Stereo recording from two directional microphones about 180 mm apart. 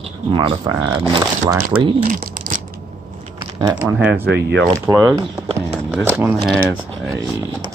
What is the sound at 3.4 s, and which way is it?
Typing, 20° right (ahead or behind).